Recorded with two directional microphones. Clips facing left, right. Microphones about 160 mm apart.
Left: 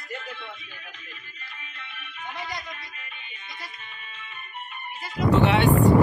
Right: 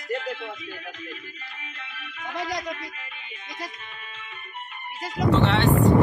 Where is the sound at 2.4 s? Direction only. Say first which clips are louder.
Right 8 dB; 90° right.